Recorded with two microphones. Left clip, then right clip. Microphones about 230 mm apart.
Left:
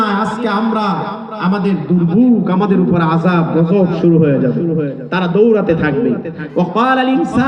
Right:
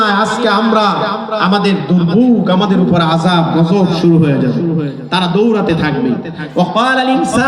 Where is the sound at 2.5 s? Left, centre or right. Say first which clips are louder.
Right 2 dB; right.